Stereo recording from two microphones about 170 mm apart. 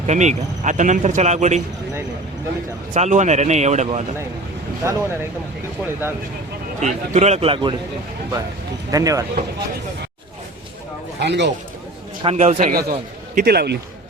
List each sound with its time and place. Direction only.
0.0 s speech: 45° right (ahead or behind)
2.9 s speech: 45° right (ahead or behind)
4.8 s speech: 15° right (ahead or behind)
6.8 s a man's voice: 45° right (ahead or behind)
8.9 s speech: 20° right (ahead or behind)
11.2 s speech: 90° right
12.2 s a man's voice: 40° right (ahead or behind)
12.7 s a man's voice: 60° right (ahead or behind)